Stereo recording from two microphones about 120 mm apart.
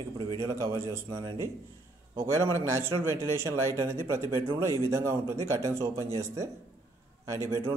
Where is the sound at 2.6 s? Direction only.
20° right (ahead or behind).